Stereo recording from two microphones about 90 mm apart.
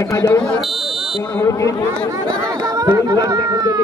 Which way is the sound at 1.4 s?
35° left (ahead or behind).